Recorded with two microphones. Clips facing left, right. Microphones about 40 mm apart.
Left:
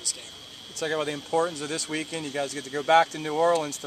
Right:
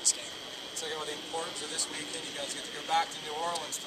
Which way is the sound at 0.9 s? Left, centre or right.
Left.